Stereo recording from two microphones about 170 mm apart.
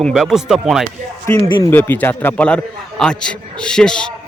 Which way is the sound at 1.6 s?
15° left (ahead or behind).